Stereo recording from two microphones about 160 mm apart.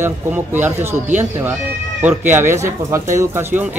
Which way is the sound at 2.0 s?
10° right (ahead or behind).